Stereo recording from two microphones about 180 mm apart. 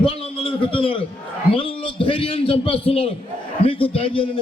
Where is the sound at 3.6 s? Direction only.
30° left (ahead or behind).